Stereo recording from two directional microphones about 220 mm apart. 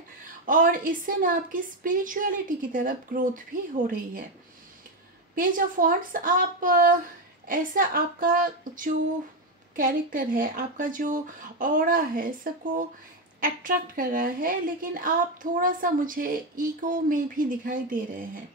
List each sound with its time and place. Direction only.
0.5 s a woman's voice: 35° right (ahead or behind)
5.3 s a woman's voice: 40° right (ahead or behind)